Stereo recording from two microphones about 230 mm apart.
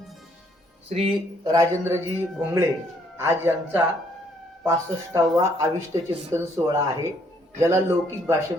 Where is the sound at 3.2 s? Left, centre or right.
Centre.